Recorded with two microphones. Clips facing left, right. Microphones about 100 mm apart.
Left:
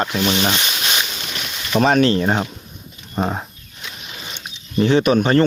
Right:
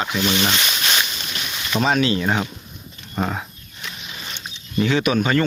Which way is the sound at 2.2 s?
30° left (ahead or behind).